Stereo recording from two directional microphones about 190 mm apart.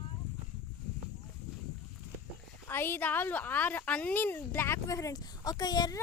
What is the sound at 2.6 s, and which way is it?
A woman's voice, 10° left (ahead or behind).